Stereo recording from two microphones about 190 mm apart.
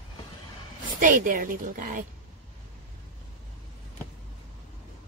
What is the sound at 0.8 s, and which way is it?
A woman's voice, 45° right (ahead or behind).